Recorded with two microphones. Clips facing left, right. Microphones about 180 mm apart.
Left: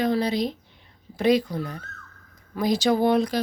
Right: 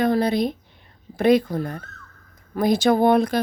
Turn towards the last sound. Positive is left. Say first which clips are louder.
# right 3 dB
turn(degrees=-55)  # may be behind; listen again after turning